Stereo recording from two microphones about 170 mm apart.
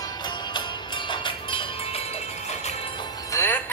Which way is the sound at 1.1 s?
30° left (ahead or behind).